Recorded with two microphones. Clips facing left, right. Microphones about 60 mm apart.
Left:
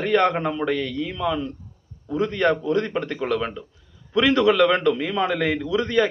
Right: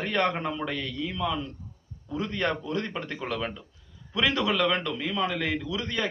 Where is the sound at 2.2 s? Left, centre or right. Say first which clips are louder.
Left 8 dB; left.